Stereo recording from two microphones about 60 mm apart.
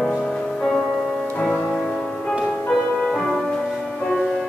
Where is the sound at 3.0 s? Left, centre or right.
Centre.